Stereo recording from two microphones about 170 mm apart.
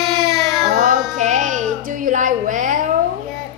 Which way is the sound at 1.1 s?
45° right (ahead or behind).